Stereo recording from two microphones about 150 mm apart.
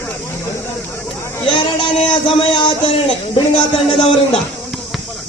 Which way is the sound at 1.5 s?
35° left (ahead or behind).